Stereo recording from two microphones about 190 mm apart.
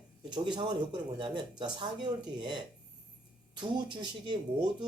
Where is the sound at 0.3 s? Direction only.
25° right (ahead or behind).